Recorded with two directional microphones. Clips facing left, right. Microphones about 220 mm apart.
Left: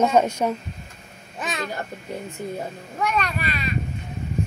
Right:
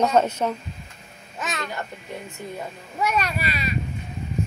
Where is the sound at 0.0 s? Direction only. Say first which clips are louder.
Left 1 dB; 10° left (ahead or behind).